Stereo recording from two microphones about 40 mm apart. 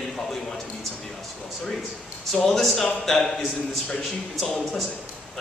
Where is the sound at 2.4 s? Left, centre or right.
Centre.